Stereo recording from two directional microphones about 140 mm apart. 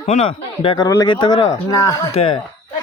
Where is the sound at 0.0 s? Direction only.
50° left (ahead or behind).